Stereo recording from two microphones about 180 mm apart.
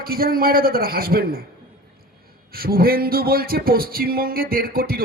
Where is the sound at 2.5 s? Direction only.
55° right (ahead or behind).